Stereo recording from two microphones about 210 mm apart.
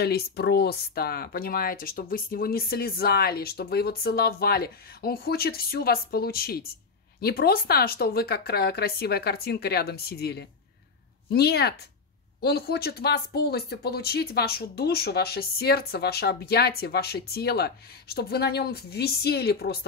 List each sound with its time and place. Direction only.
0.0 s speech: 50° left (ahead or behind)